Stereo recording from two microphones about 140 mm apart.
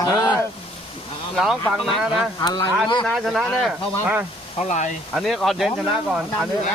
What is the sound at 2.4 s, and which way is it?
Speech, 30° left (ahead or behind).